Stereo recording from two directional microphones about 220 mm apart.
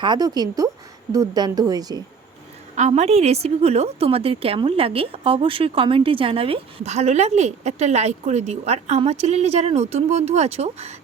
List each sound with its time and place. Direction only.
0.0 s speech: 20° right (ahead or behind)
2.7 s a woman's voice: 30° right (ahead or behind)